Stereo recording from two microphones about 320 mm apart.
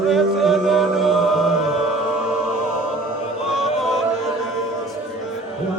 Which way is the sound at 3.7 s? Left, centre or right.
Centre.